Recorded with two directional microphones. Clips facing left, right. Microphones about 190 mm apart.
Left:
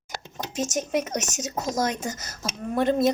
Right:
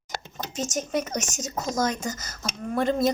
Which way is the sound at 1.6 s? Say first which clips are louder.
Even; 5° left (ahead or behind).